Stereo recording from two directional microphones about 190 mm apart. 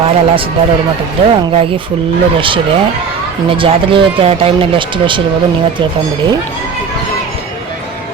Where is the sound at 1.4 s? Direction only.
25° right (ahead or behind).